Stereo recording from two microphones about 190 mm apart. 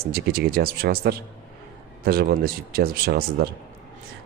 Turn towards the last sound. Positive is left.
turn(degrees=-55)  # may be behind; listen again after turning